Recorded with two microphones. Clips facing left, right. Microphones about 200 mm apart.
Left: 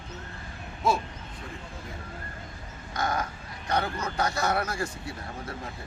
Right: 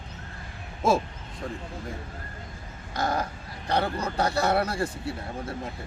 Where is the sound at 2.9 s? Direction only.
30° right (ahead or behind).